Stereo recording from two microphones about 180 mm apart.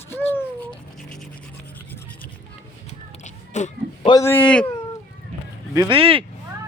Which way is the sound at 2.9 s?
40° left (ahead or behind).